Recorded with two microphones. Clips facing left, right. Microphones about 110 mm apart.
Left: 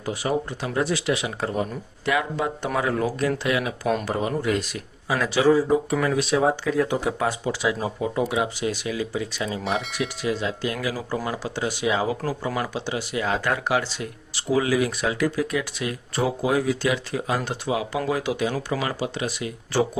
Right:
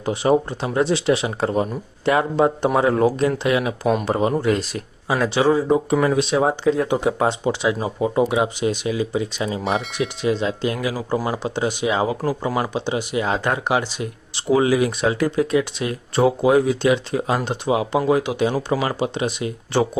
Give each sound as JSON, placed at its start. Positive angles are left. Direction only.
{"t": 0.0, "sound": "speech", "side_deg": -25}